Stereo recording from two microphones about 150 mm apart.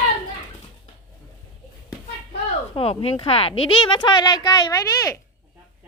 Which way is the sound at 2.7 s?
40° left (ahead or behind).